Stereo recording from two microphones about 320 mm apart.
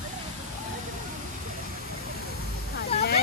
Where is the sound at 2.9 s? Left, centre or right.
Left.